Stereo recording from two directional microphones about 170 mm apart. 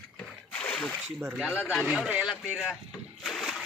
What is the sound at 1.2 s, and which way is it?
Speech, 5° right (ahead or behind).